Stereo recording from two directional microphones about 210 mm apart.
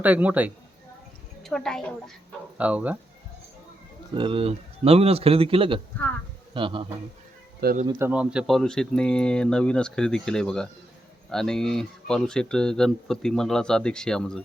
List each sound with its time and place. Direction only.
0.0 s a man's voice: 5° right (ahead or behind)
4.1 s a man's voice: 25° right (ahead or behind)
7.6 s speech: 45° right (ahead or behind)
7.9 s speech: 10° right (ahead or behind)